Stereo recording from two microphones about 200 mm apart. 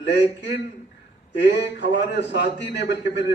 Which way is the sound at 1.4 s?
60° left (ahead or behind).